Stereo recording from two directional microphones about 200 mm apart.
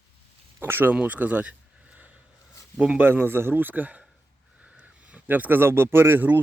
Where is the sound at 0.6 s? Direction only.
10° right (ahead or behind).